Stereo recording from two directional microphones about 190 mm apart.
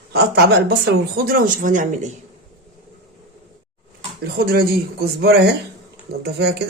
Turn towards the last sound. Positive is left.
turn(degrees=-60)  # may be behind; listen again after turning